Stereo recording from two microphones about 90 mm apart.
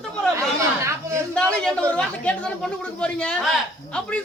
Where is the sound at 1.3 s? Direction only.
10° left (ahead or behind).